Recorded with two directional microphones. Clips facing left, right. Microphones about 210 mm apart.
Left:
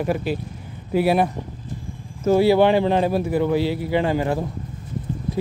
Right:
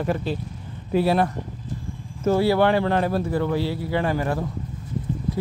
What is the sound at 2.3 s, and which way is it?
Speech, 15° left (ahead or behind).